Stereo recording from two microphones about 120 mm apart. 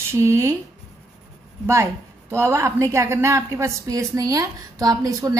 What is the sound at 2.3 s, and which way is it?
A woman's voice, 20° right (ahead or behind).